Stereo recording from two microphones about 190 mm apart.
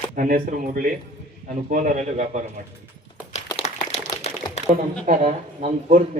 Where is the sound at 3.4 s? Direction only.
30° left (ahead or behind).